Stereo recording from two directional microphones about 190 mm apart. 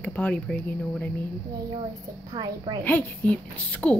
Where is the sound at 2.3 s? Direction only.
20° right (ahead or behind).